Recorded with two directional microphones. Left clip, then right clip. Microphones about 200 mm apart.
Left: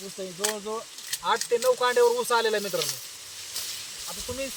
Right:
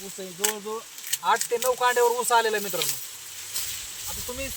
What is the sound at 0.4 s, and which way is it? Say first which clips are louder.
Speech: right 1 dB; 10° right (ahead or behind).